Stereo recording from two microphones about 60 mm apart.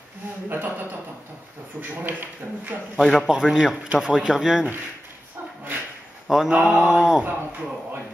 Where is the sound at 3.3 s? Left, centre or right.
Centre.